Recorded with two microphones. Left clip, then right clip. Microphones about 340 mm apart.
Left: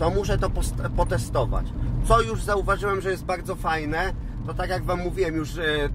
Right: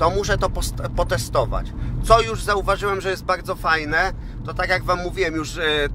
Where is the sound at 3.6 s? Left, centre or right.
Right.